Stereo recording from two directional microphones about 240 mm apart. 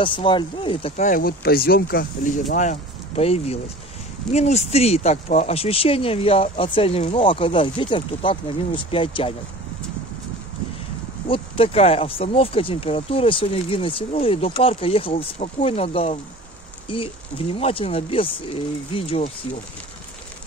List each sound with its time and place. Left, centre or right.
0.0 s speech: left
11.2 s speech: left